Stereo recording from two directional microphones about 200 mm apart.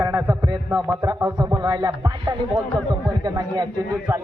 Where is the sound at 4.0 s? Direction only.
5° right (ahead or behind).